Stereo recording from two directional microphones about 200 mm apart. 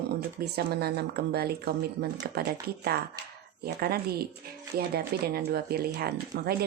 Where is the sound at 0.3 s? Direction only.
50° right (ahead or behind).